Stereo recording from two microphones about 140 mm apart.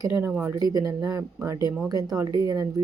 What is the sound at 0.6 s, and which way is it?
Speech, 25° right (ahead or behind).